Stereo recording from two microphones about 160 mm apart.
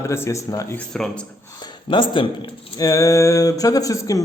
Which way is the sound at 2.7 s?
20° left (ahead or behind).